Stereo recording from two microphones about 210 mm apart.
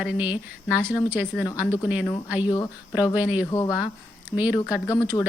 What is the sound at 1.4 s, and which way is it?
Speech, 15° left (ahead or behind).